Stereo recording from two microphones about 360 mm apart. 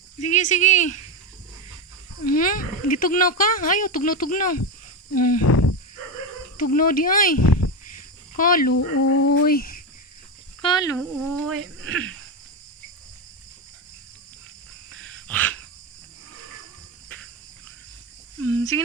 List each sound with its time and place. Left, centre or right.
0.2 s speech: centre
2.2 s speech: left
5.4 s a sound: left
6.7 s speech: left
7.3 s a sound: left
8.4 s speech: left
8.7 s speech: left
9.3 s speech: left
10.6 s speech: centre
11.4 s speech: right
14.8 s wild animals: right
15.3 s cricket: centre
18.3 s a sound: right